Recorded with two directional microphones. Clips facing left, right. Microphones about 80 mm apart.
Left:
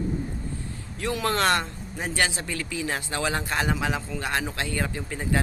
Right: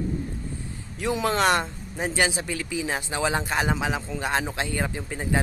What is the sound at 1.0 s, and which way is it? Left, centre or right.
Speech, centre.